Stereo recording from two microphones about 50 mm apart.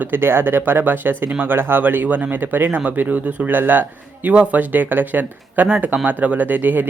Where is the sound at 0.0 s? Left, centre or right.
Right.